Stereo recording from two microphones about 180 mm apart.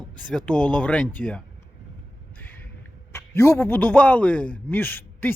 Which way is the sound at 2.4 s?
10° left (ahead or behind).